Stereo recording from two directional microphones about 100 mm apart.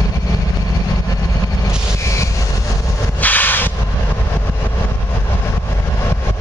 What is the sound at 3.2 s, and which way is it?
Train, 15° left (ahead or behind).